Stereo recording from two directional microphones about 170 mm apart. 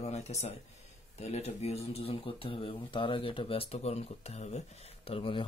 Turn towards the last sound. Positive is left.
turn(degrees=30)  # may be behind; listen again after turning